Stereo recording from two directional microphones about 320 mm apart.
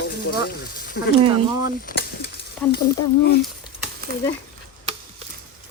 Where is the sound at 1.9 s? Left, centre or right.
Left.